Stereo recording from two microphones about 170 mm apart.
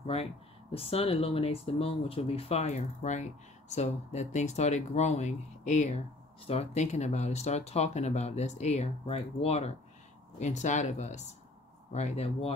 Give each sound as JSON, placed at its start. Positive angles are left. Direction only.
{"t": 0.0, "sound": "speech", "side_deg": 35}